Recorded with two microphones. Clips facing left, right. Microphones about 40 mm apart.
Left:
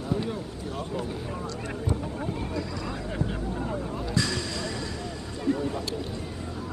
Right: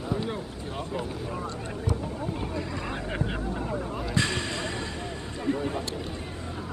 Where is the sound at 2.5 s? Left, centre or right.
Right.